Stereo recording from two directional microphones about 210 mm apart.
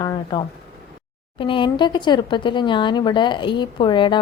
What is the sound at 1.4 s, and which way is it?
Speech, 25° left (ahead or behind).